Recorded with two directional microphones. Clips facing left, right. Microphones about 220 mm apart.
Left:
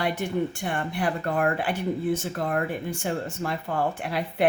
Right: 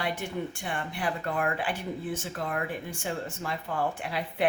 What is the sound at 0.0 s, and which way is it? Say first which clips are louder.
A woman's voice: left 6 dB; 40° left (ahead or behind).